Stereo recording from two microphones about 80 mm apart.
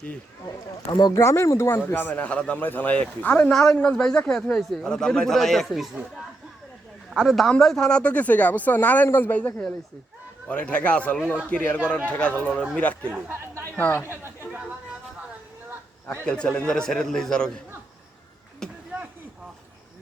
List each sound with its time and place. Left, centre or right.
0.4 s speech: left
1.1 s speech: left; by 3.5 s centre
3.5 s a man's voice: centre
7.1 s a man's voice: centre; by 9.5 s left
10.5 s a man's voice: centre
13.1 s speech: right
13.7 s speech: centre
14.1 s chatter: right
16.2 s a man's voice: centre
18.6 s speech: centre